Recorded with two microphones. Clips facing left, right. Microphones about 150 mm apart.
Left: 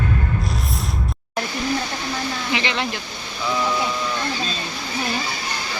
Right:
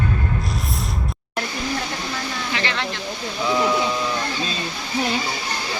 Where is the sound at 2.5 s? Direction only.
15° left (ahead or behind).